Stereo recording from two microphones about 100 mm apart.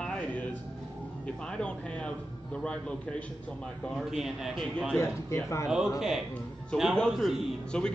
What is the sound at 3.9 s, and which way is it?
A man's voice, 5° right (ahead or behind).